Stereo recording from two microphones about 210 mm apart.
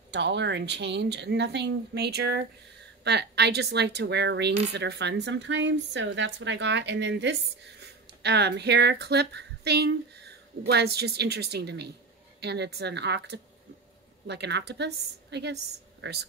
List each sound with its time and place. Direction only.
0.1 s a woman's voice: 55° right (ahead or behind)